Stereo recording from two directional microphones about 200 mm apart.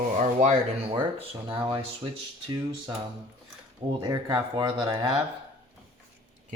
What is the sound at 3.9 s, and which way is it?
Speech, 20° right (ahead or behind).